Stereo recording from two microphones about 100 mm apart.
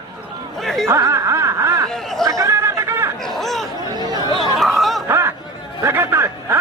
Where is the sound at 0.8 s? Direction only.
25° right (ahead or behind).